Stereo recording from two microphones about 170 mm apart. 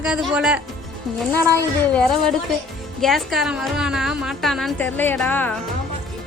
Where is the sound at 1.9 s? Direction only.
5° left (ahead or behind).